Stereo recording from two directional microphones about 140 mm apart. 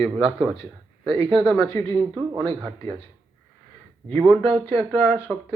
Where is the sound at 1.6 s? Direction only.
20° left (ahead or behind).